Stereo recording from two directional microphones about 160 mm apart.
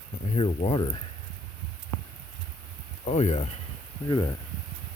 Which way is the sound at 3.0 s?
45° left (ahead or behind).